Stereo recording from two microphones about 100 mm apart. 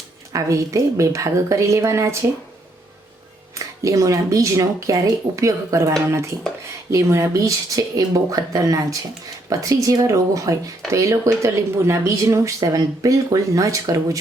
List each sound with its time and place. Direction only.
0.3 s speech: 30° right (ahead or behind)
3.5 s speech: 35° right (ahead or behind)
6.1 s dishes: 25° right (ahead or behind)
6.9 s speech: 30° right (ahead or behind)